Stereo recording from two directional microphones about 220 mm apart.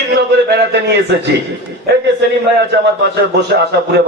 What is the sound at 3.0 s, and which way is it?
Speech, 50° right (ahead or behind).